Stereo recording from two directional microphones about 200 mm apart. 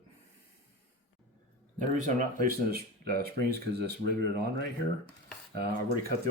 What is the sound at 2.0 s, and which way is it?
Speech, 40° right (ahead or behind).